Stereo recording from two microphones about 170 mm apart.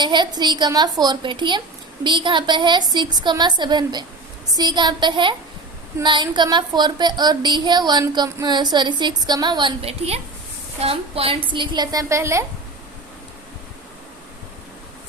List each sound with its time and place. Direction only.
0.0 s a woman's voice: 25° right (ahead or behind)